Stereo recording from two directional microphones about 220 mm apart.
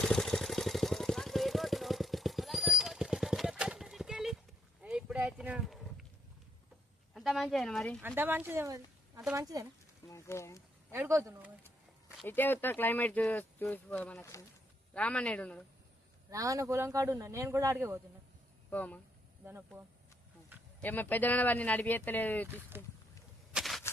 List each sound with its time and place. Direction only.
0.0 s vehicle: centre (ahead or behind)
4.8 s a sound: 5° right (ahead or behind)
7.1 s a sound: centre (ahead or behind)
8.0 s speech: 10° right (ahead or behind)
10.1 s a sound: 10° left (ahead or behind)
10.9 s speech: 10° right (ahead or behind)
12.2 s speech: 10° left (ahead or behind)
16.3 s speech: 15° right (ahead or behind)
18.7 s speech: 5° left (ahead or behind)
19.5 s speech: 10° right (ahead or behind)
20.8 s speech: 10° left (ahead or behind)
22.7 s speech: 10° right (ahead or behind)
23.5 s a sound: centre (ahead or behind)